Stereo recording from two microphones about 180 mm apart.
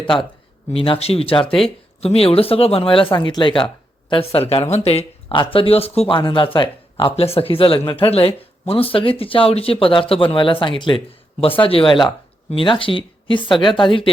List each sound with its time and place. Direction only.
0.7 s speech: 30° left (ahead or behind)
1.5 s speech: centre (ahead or behind)
2.0 s speech: 35° left (ahead or behind)